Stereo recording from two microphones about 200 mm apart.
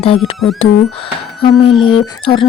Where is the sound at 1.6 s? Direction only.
25° left (ahead or behind).